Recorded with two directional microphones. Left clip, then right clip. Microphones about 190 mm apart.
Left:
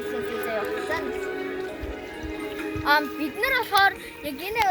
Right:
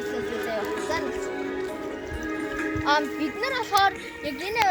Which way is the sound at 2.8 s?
5° right (ahead or behind).